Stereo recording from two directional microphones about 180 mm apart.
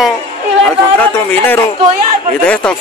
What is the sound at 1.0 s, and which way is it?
Speech, 10° left (ahead or behind).